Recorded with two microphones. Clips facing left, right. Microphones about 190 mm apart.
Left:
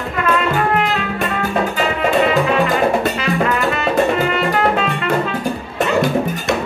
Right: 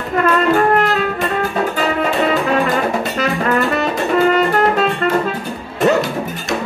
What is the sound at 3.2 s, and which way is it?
Music, 45° right (ahead or behind).